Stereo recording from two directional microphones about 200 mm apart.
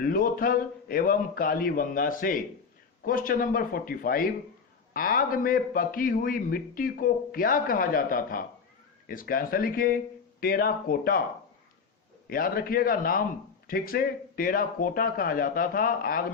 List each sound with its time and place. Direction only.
0.0 s a man's voice: 45° left (ahead or behind)
12.3 s a man's voice: 45° left (ahead or behind)